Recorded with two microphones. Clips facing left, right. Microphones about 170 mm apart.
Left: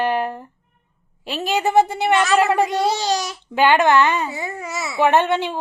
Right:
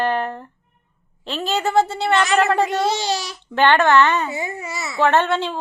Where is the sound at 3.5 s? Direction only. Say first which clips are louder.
Even; 10° left (ahead or behind).